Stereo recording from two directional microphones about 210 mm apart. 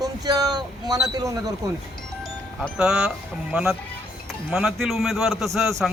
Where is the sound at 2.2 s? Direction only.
Centre (ahead or behind).